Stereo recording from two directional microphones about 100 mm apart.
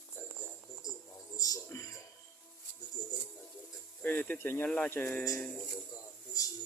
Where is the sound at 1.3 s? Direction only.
35° left (ahead or behind).